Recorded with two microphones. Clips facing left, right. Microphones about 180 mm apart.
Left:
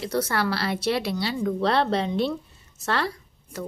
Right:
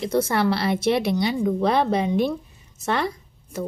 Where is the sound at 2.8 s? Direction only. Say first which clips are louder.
Right 2 dB; 20° right (ahead or behind).